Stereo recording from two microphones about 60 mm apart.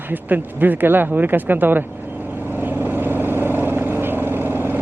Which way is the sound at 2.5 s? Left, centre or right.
Right.